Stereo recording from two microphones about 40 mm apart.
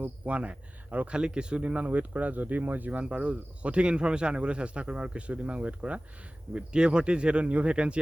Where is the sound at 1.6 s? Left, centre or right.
Right.